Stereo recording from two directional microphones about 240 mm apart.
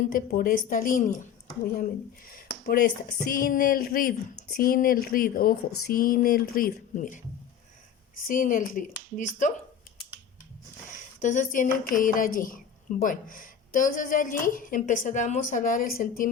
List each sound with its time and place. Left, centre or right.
0.1 s a woman's voice: left
2.3 s a woman's voice: left
8.3 s a woman's voice: left
11.2 s a woman's voice: left